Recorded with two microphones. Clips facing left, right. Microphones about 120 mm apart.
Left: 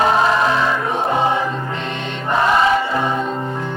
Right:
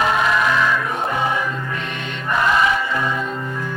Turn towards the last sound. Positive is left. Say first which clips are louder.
# left 3 dB
turn(degrees=30)  # may be behind; listen again after turning